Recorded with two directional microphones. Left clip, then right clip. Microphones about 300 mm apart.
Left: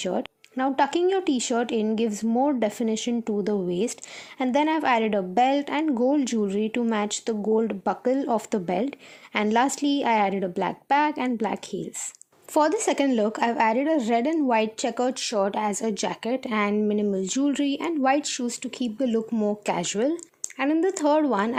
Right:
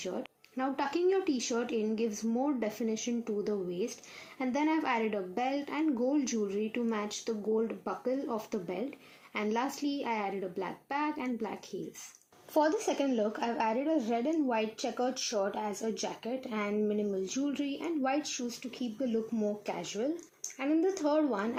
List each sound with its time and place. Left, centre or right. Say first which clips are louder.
0.0 s a woman's voice: left 10 dB; left